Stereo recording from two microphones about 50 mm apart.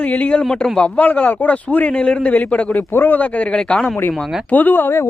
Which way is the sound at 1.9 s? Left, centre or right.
Left.